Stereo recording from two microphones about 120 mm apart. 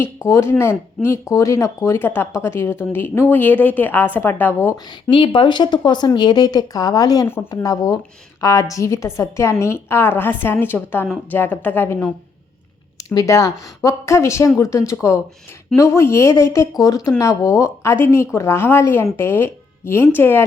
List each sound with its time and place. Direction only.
0.3 s speech: 25° left (ahead or behind)
5.1 s a woman's voice: 45° left (ahead or behind); by 12.1 s 15° left (ahead or behind)
13.1 s speech: 25° left (ahead or behind)